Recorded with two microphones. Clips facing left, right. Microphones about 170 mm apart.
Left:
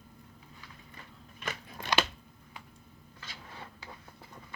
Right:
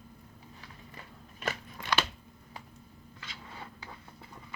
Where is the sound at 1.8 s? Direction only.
15° left (ahead or behind).